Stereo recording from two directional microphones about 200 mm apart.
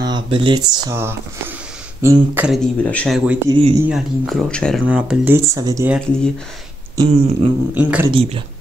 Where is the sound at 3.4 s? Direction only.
25° right (ahead or behind).